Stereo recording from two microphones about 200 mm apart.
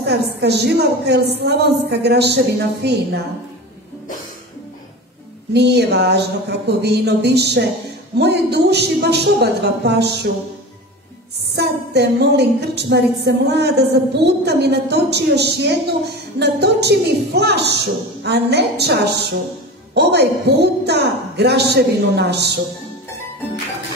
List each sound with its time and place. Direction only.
0.0 s a woman's voice: 55° right (ahead or behind)
5.5 s a woman's voice: 55° right (ahead or behind)
11.5 s a woman's voice: 55° right (ahead or behind)